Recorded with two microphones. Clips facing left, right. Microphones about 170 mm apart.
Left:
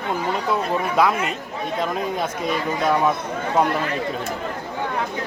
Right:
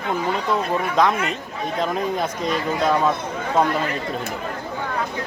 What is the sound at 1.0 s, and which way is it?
Speech, 5° left (ahead or behind).